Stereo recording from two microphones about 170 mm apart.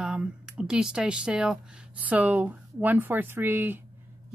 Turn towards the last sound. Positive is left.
turn(degrees=-10)  # may be behind; listen again after turning